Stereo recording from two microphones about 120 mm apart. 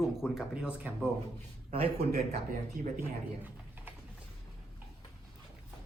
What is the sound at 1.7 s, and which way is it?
Speech, 55° right (ahead or behind).